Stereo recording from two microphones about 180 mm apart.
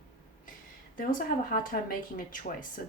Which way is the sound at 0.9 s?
50° left (ahead or behind).